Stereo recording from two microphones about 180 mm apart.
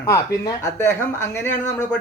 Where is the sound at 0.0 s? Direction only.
15° left (ahead or behind).